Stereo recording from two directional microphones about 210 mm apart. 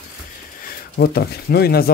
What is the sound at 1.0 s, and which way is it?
Speech, 50° left (ahead or behind).